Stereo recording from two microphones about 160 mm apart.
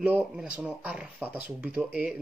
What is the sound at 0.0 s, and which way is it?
Speech, 10° right (ahead or behind).